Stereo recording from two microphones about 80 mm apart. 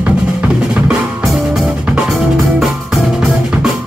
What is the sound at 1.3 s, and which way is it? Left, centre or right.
Music, centre.